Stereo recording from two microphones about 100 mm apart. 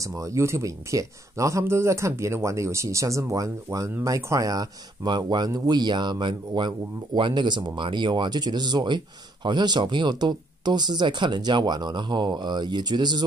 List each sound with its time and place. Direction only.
0.0 s speech: 30° right (ahead or behind); by 13.2 s 45° right (ahead or behind)